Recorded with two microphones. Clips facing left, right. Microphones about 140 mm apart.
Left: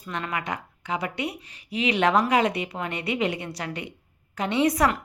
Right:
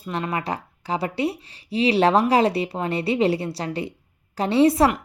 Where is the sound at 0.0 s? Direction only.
30° right (ahead or behind).